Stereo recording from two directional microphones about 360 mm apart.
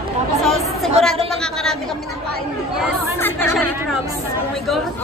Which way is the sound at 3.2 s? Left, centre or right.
Centre.